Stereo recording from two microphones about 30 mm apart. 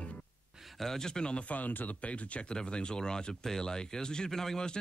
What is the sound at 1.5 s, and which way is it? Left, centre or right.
Speech, left.